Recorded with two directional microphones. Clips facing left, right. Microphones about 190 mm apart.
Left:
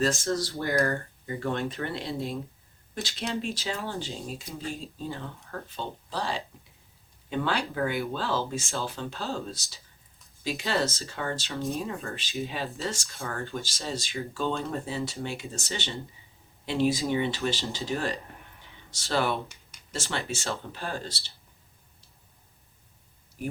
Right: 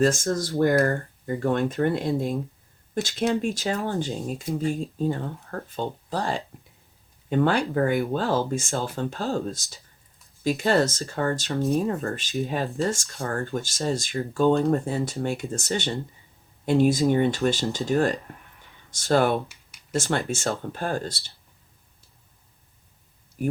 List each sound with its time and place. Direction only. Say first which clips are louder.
0.0 s speech: right 5 dB; 50° right (ahead or behind)